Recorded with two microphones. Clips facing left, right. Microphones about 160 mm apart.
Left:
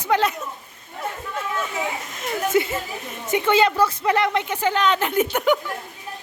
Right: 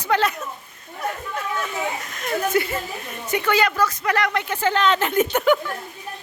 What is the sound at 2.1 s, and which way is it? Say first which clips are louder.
Speech: left 1 dB; 20° left (ahead or behind).